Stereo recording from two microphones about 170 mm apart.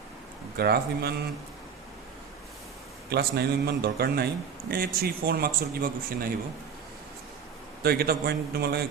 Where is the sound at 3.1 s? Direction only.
70° right (ahead or behind).